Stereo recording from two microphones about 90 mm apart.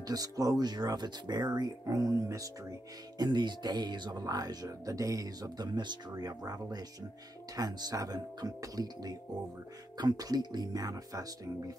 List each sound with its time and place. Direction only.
0.0 s speech: 45° right (ahead or behind)
3.2 s speech: 55° right (ahead or behind)